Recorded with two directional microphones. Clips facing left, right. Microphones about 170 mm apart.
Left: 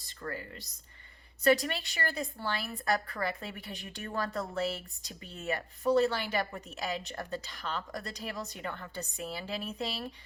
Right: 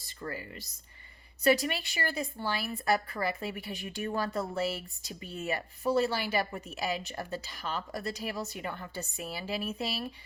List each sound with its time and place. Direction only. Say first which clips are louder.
0.2 s speech: right 1 dB; 10° right (ahead or behind)